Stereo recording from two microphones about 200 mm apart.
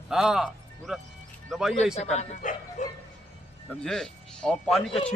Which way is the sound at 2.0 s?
35° left (ahead or behind).